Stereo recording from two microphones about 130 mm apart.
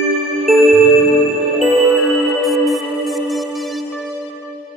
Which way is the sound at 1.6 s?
Centre (ahead or behind).